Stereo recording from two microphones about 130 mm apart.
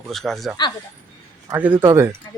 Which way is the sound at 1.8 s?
20° right (ahead or behind).